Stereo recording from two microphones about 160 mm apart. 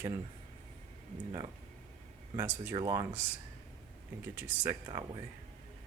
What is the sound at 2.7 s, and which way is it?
Speech, 25° right (ahead or behind).